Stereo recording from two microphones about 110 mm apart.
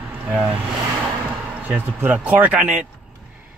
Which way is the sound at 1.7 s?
10° right (ahead or behind).